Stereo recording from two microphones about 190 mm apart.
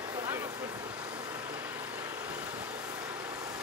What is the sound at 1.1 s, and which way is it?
Vehicle, 10° right (ahead or behind).